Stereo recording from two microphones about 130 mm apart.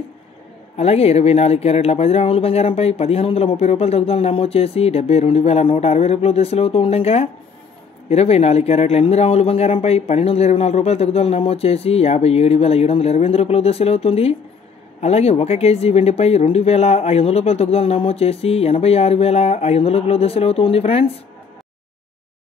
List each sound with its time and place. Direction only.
0.7 s speech: 55° left (ahead or behind)